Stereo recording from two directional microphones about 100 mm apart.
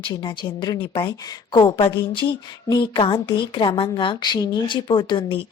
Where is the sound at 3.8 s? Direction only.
60° left (ahead or behind).